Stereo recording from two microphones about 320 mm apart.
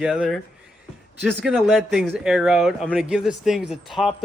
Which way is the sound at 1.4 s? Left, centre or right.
Centre.